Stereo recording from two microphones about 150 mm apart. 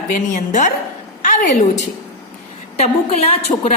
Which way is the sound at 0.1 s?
55° left (ahead or behind).